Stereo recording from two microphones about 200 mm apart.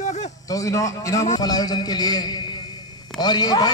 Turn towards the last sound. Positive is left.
turn(degrees=20)  # may be behind; listen again after turning